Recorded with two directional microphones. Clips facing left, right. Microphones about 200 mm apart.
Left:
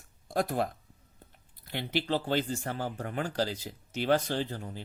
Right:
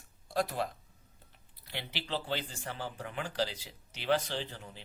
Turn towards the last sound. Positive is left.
turn(degrees=45)  # may be behind; listen again after turning